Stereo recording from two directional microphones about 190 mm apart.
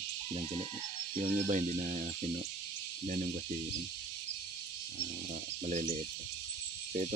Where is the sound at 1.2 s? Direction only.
40° right (ahead or behind).